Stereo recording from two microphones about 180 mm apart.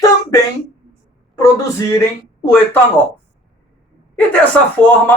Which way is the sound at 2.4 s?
10° left (ahead or behind).